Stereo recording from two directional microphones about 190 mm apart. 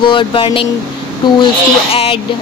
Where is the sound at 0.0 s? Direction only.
25° left (ahead or behind).